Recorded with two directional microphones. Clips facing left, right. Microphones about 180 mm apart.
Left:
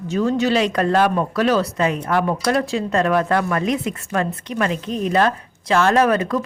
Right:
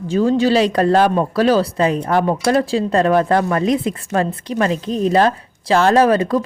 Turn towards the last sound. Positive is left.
turn(degrees=-30)  # may be behind; listen again after turning